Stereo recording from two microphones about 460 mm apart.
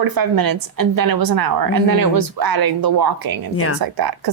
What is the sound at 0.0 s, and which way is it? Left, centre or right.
A woman's voice, right.